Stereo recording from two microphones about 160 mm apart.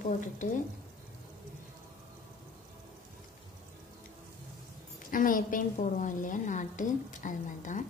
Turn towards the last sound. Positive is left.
turn(degrees=50)  # may be behind; listen again after turning